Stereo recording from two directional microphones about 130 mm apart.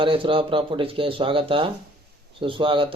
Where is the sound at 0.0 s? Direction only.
40° right (ahead or behind).